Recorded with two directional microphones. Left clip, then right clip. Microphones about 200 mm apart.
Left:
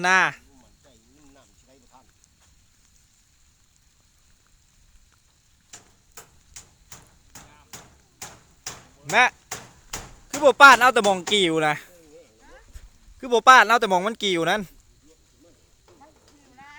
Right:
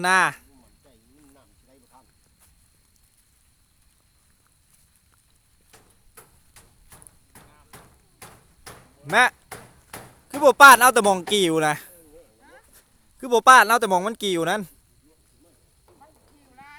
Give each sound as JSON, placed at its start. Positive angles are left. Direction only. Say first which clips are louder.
{"t": 0.0, "sound": "speech", "louder": "even", "side_deg": -10}
{"t": 5.7, "sound": "hammer", "louder": "left 5 dB", "side_deg": 50}
{"t": 9.0, "sound": "speech", "louder": "even", "side_deg": -15}
{"t": 9.5, "sound": "finger snapping", "louder": "left 4 dB", "side_deg": 55}
{"t": 10.4, "sound": "speech", "louder": "right 1 dB", "side_deg": -15}
{"t": 16.6, "sound": "a sound", "louder": "even", "side_deg": -10}